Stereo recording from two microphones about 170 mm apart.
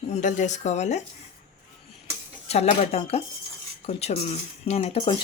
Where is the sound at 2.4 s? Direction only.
40° left (ahead or behind).